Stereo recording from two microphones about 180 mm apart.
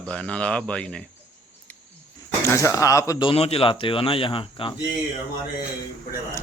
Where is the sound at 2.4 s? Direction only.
15° left (ahead or behind).